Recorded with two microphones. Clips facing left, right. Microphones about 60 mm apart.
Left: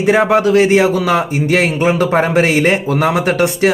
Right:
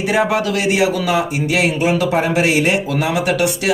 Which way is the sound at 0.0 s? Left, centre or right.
Left.